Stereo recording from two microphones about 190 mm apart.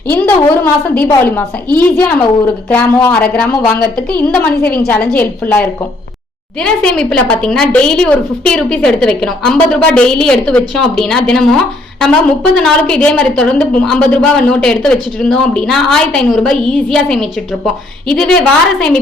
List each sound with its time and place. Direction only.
0.1 s a woman's voice: 10° left (ahead or behind)